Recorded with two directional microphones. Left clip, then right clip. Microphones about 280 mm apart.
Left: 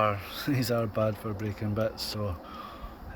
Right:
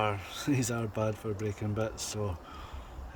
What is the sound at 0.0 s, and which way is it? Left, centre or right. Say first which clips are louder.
Speech: left 4 dB; centre.